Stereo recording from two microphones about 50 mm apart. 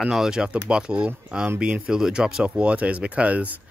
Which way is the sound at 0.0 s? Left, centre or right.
Centre.